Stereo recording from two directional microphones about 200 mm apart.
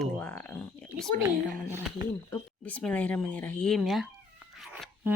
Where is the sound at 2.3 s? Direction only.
10° left (ahead or behind).